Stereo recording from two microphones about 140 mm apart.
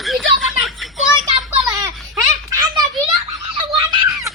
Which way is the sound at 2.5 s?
30° right (ahead or behind).